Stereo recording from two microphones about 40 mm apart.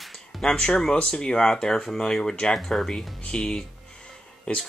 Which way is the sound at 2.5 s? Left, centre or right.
Centre.